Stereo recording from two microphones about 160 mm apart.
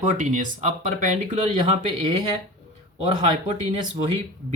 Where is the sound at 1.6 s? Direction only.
30° right (ahead or behind).